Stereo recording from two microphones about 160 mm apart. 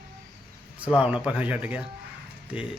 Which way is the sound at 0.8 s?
5° right (ahead or behind).